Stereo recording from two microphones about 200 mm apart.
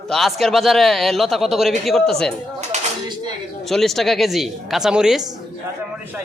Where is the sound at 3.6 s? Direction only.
Centre (ahead or behind).